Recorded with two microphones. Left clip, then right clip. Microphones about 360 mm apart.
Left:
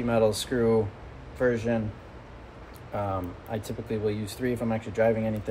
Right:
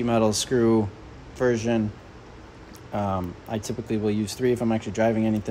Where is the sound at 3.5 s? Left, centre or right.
Right.